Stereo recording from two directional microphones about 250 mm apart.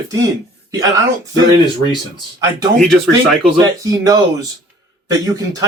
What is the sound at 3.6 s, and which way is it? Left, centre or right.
Speech, centre.